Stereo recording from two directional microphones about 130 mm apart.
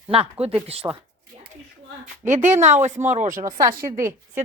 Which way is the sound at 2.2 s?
70° right (ahead or behind).